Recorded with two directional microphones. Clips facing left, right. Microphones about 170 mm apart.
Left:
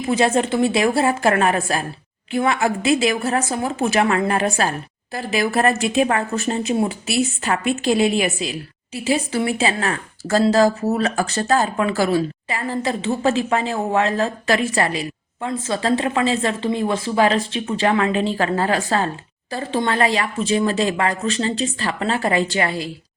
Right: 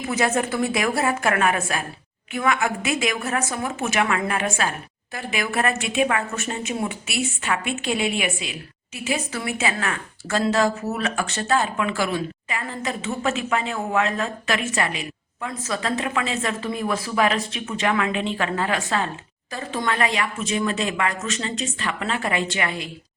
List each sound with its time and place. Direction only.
0.0 s a woman's voice: 30° left (ahead or behind)